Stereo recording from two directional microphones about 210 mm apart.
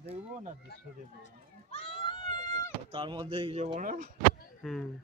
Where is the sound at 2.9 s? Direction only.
25° right (ahead or behind).